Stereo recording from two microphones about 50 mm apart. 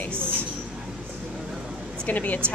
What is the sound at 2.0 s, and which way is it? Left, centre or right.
Speech, left.